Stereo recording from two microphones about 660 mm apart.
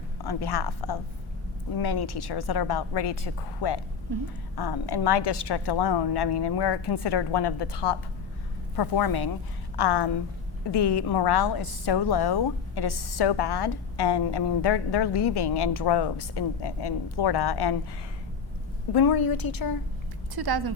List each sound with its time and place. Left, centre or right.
0.3 s a woman's voice: left
18.9 s a woman's voice: left
20.3 s speech: right